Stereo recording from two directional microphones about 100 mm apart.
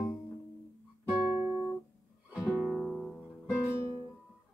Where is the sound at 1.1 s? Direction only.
15° right (ahead or behind).